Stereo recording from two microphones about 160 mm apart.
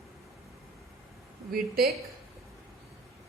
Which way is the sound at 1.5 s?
75° right (ahead or behind).